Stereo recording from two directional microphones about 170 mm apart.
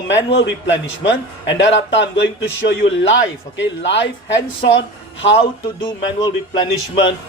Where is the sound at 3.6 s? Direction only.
90° left.